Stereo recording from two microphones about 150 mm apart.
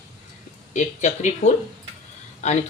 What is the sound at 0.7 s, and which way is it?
Speech, 55° left (ahead or behind).